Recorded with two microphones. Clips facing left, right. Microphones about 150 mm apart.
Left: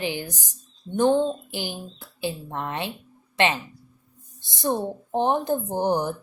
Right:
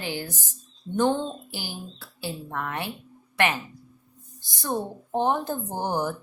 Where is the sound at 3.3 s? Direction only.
20° left (ahead or behind).